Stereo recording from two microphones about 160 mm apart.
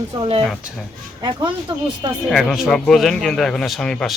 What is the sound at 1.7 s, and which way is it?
Speech, 30° right (ahead or behind).